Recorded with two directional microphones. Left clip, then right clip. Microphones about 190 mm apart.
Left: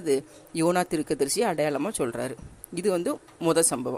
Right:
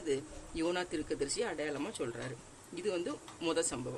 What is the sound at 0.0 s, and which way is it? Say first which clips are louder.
A man's voice: left 10 dB; 35° left (ahead or behind).